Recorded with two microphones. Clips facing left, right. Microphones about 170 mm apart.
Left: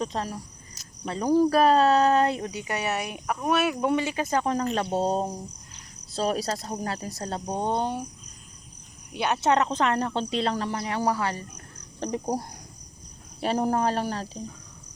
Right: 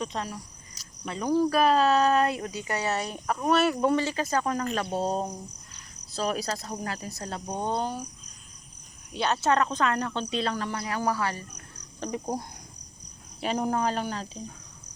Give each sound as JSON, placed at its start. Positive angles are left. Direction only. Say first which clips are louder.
{"t": 0.0, "sound": "cricket", "louder": "left 3 dB", "side_deg": 35}
{"t": 1.5, "sound": "speech", "louder": "left 1 dB", "side_deg": 30}
{"t": 9.1, "sound": "speech", "louder": "left 2 dB", "side_deg": 15}
{"t": 13.4, "sound": "speech", "louder": "left 3 dB", "side_deg": 40}